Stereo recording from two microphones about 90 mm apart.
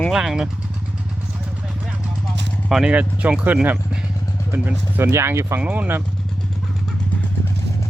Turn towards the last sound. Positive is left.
turn(degrees=-15)  # may be behind; listen again after turning